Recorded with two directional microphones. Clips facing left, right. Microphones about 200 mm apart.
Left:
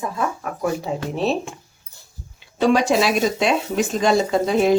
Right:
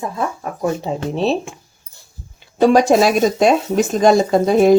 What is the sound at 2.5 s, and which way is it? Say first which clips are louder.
Speech: right 5 dB; 45° right (ahead or behind).